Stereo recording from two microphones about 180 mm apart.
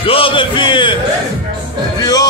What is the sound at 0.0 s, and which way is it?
Speech, 30° left (ahead or behind).